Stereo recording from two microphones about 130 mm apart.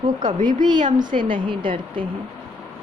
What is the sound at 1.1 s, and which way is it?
Speech, 40° right (ahead or behind).